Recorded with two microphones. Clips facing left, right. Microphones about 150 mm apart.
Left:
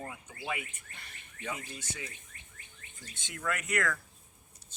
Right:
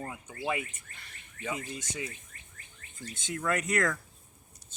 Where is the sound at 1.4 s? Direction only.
15° right (ahead or behind).